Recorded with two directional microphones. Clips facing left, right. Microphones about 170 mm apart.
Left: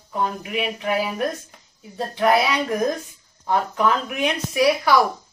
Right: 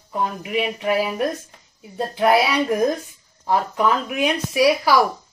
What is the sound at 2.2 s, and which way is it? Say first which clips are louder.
Speech: right 2 dB; 5° right (ahead or behind).